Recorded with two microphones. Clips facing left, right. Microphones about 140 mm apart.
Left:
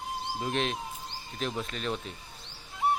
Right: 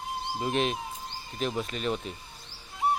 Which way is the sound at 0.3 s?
5° right (ahead or behind).